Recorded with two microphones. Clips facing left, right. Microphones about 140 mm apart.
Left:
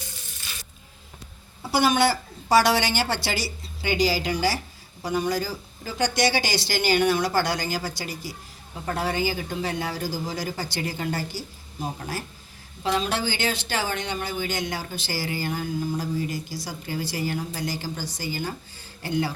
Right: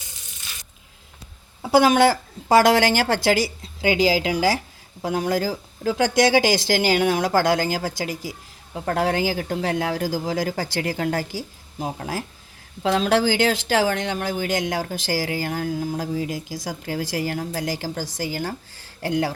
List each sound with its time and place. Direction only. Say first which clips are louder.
2.7 s speech: right 6 dB; 90° right
8.7 s speech: right 5 dB; 80° right